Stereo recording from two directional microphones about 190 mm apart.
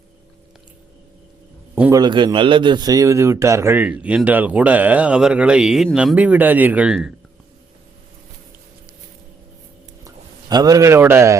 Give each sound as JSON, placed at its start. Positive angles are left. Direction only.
{"t": 1.7, "sound": "a sound", "side_deg": -10}
{"t": 2.0, "sound": "a man's voice", "side_deg": -25}
{"t": 10.5, "sound": "a man's voice", "side_deg": -20}